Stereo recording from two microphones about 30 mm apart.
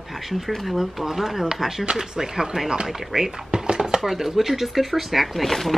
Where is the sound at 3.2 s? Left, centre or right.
Right.